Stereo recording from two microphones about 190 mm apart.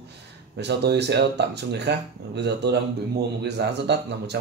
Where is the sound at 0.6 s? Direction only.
60° right (ahead or behind).